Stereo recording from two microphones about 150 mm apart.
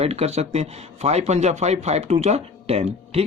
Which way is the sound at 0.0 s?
45° right (ahead or behind).